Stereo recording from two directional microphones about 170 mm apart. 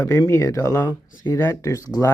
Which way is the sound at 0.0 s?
20° left (ahead or behind).